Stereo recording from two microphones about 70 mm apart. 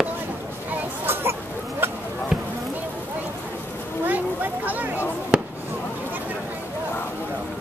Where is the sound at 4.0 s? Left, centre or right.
Right.